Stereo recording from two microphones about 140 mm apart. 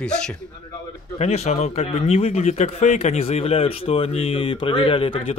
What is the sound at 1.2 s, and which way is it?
Speech, 50° left (ahead or behind).